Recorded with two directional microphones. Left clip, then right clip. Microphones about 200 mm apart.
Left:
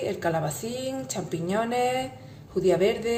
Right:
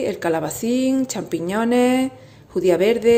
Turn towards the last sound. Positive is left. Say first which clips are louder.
# right 7 dB
turn(degrees=-45)  # may be behind; listen again after turning